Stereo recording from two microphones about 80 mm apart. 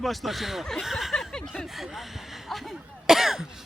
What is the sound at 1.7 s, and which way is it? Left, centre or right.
Cough, centre.